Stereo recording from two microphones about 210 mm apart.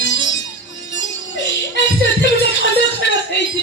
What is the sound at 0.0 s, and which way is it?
Music, 60° left (ahead or behind).